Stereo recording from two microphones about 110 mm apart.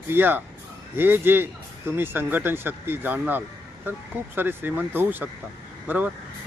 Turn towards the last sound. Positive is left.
turn(degrees=-15)  # may be behind; listen again after turning